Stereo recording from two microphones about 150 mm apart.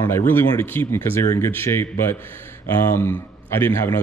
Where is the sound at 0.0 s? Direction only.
15° left (ahead or behind).